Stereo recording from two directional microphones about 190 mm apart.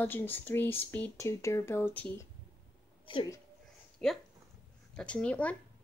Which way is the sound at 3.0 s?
25° left (ahead or behind).